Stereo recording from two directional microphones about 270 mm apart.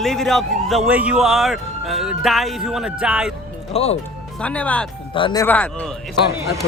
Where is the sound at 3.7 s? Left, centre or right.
Left.